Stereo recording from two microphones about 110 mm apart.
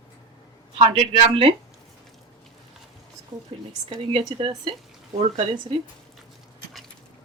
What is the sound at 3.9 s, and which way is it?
Speech, 60° right (ahead or behind).